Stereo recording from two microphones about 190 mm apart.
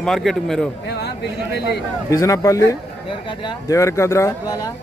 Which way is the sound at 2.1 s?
15° left (ahead or behind).